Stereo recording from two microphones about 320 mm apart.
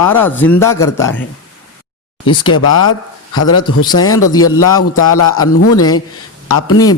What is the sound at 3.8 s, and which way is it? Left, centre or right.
Speech, centre.